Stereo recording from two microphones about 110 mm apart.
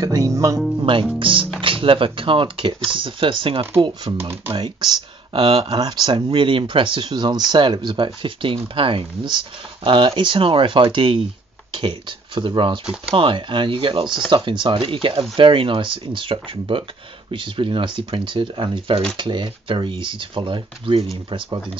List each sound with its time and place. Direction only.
0.0 s speech: 30° right (ahead or behind)
0.7 s speech: 50° right (ahead or behind)
4.2 s speech: 25° right (ahead or behind)
4.6 s speech: 45° right (ahead or behind)